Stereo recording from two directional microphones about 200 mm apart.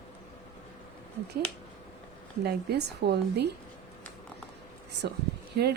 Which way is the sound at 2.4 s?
55° right (ahead or behind).